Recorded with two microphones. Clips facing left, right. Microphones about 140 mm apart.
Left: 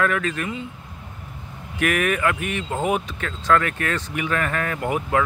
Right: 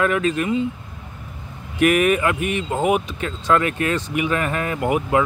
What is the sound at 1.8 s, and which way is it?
Speech, 20° right (ahead or behind).